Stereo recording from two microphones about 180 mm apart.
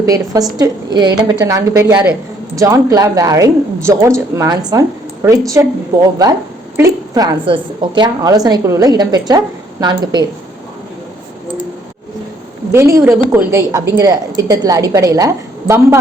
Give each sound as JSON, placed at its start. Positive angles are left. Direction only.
{"t": 0.0, "sound": "a woman's voice", "side_deg": -20}
{"t": 12.7, "sound": "a woman's voice", "side_deg": -15}